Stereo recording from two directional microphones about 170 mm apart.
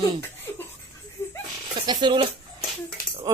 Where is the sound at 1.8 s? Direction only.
25° right (ahead or behind).